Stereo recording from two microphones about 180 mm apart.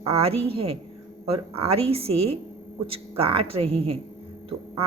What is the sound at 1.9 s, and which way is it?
A woman's voice, 35° right (ahead or behind).